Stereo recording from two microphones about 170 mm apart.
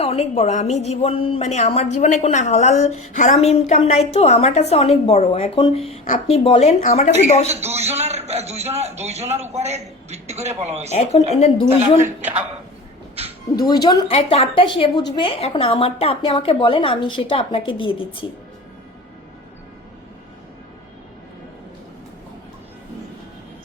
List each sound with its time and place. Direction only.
0.0 s speech: 35° left (ahead or behind)
7.4 s a man's voice: 40° right (ahead or behind)
10.9 s speech: 40° left (ahead or behind)
13.8 s speech: 25° left (ahead or behind)
14.1 s speech: 35° left (ahead or behind)